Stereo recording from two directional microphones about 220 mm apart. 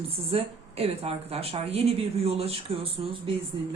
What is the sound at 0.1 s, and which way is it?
Speech, 25° right (ahead or behind).